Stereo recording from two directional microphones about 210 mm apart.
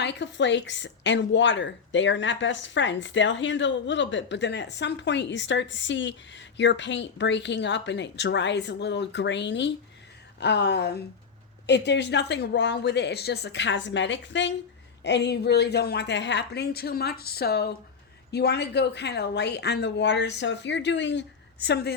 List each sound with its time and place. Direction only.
0.0 s a woman's voice: 55° left (ahead or behind)